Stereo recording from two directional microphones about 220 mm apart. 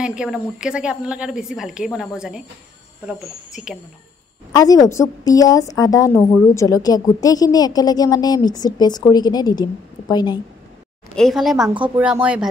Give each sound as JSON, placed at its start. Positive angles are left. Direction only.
{"t": 0.0, "sound": "a woman's voice", "side_deg": -5}
{"t": 4.5, "sound": "a woman's voice", "side_deg": 15}
{"t": 11.1, "sound": "a woman's voice", "side_deg": 0}